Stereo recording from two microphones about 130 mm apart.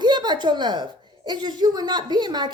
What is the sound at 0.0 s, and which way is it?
A woman's voice, 35° right (ahead or behind).